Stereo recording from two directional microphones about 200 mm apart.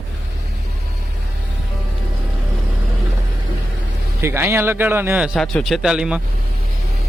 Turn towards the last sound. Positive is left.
turn(degrees=-5)  # may be behind; listen again after turning